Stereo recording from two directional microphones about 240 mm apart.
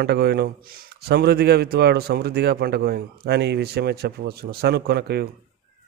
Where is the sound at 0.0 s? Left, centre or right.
Right.